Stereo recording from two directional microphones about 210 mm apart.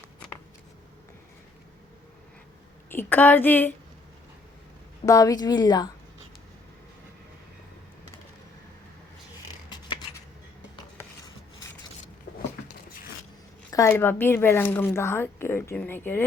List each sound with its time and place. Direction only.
2.9 s speech: 10° left (ahead or behind)
5.0 s speech: 15° left (ahead or behind)
13.7 s speech: 15° left (ahead or behind)